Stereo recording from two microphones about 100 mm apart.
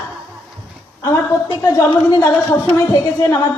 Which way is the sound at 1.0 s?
25° left (ahead or behind).